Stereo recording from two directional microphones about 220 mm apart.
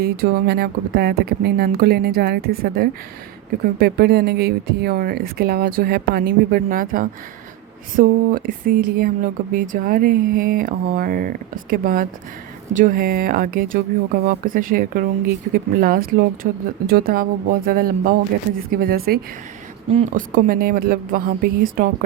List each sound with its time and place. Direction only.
0.0 s speech: 45° right (ahead or behind)
19.9 s speech: 30° right (ahead or behind)